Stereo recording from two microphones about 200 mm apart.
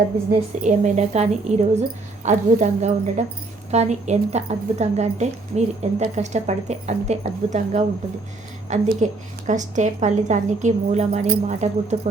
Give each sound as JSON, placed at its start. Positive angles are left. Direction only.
{"t": 0.6, "sound": "a woman's voice", "side_deg": -35}